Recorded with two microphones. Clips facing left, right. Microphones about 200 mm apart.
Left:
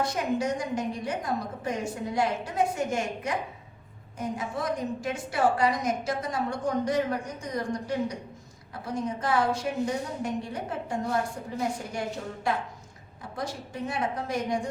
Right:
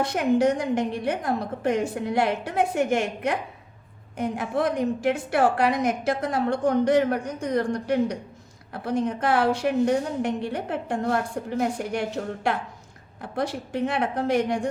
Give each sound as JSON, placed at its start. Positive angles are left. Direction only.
{"t": 0.1, "sound": "a woman's voice", "side_deg": -70}